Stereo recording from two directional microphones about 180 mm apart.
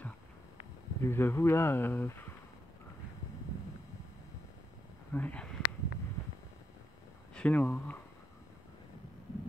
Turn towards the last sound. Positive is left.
turn(degrees=10)  # may be behind; listen again after turning